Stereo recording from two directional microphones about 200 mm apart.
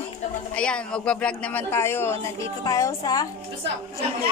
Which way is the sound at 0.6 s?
5° left (ahead or behind).